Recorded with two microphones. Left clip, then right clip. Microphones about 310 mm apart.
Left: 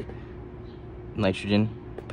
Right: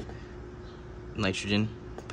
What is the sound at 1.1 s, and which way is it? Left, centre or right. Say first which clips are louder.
Speech: left 4 dB; centre.